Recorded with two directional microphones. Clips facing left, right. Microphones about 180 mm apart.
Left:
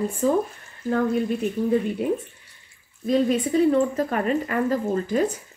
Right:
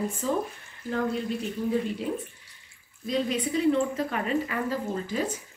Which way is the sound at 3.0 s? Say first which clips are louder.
Left 7 dB; 50° left (ahead or behind).